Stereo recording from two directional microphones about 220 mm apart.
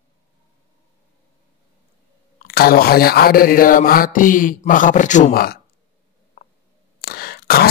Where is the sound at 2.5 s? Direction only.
45° left (ahead or behind).